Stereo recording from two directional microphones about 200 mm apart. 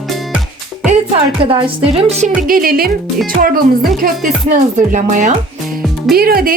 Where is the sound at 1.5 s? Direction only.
30° right (ahead or behind).